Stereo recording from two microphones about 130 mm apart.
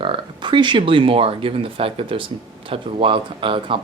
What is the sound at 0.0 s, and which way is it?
Speech, 40° right (ahead or behind).